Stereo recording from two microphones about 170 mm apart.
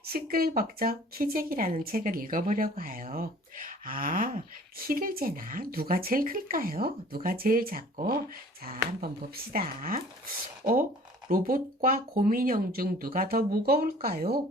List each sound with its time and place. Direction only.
0.0 s speech: 60° right (ahead or behind)
11.3 s speech: 55° right (ahead or behind)